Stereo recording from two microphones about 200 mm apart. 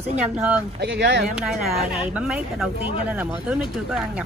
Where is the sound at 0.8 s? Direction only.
60° right (ahead or behind).